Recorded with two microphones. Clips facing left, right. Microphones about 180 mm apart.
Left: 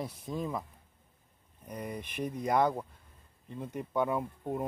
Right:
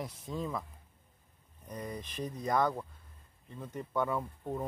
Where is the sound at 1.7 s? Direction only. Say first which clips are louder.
Left 2 dB; 10° left (ahead or behind).